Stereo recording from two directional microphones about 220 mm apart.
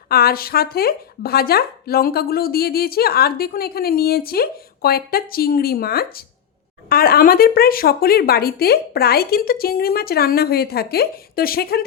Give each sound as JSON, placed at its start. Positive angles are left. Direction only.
{"t": 0.1, "sound": "speech", "side_deg": 45}